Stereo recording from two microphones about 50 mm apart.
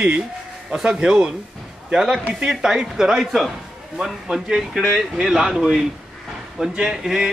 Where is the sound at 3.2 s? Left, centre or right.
Centre.